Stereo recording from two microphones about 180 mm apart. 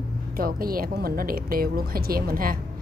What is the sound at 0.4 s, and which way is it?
Speech, 55° right (ahead or behind).